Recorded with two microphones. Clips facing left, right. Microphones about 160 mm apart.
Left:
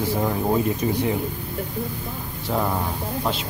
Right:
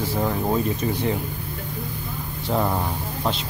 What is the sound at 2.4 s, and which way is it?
Speech, 5° right (ahead or behind).